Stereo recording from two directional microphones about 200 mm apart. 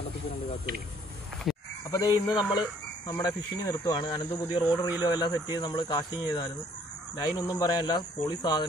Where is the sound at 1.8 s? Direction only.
15° left (ahead or behind).